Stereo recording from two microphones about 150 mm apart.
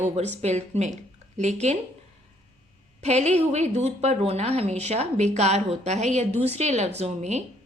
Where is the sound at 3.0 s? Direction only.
45° right (ahead or behind).